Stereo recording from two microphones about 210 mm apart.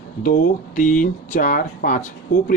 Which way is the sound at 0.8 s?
40° left (ahead or behind).